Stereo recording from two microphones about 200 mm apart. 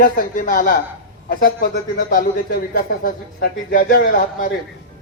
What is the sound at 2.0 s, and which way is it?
A man's voice, 45° left (ahead or behind).